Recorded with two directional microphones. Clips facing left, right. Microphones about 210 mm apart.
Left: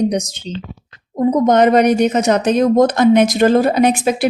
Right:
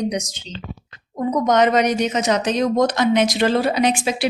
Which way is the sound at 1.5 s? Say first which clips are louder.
Left 4 dB; 55° left (ahead or behind).